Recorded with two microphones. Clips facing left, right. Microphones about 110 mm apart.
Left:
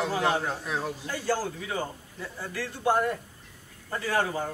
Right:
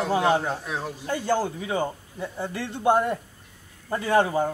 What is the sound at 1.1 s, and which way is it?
A man's voice, 20° right (ahead or behind).